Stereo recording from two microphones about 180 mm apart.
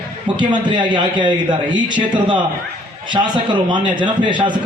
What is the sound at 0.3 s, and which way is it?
A man's voice, 25° right (ahead or behind).